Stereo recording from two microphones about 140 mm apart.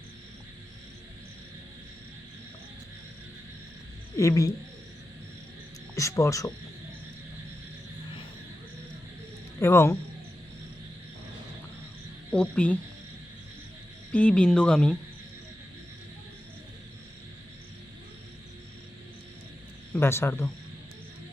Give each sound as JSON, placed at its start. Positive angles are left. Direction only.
{"t": 4.2, "sound": "speech", "side_deg": 20}
{"t": 6.0, "sound": "speech", "side_deg": 20}
{"t": 9.6, "sound": "speech", "side_deg": 20}
{"t": 12.3, "sound": "speech", "side_deg": 10}
{"t": 14.1, "sound": "speech", "side_deg": 10}
{"t": 19.9, "sound": "speech", "side_deg": 20}